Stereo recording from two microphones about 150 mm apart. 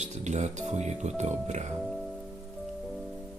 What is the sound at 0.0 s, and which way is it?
Speech, 50° right (ahead or behind).